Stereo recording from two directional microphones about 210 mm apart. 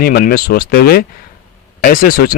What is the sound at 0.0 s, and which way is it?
Speech, 45° left (ahead or behind).